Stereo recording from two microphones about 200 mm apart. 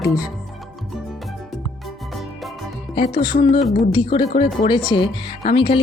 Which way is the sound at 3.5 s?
25° left (ahead or behind).